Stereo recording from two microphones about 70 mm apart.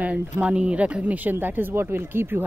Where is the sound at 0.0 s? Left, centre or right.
Centre.